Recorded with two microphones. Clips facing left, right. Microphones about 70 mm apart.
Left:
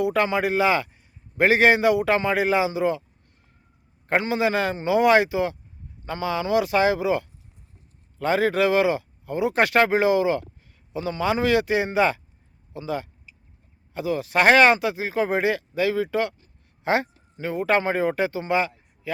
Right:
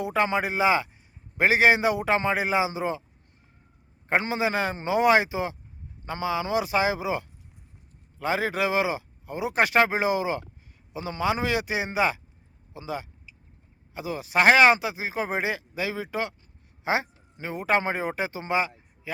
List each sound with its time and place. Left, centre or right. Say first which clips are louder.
0.0 s a man's voice: left 3 dB; centre
4.2 s a man's voice: left 5 dB; right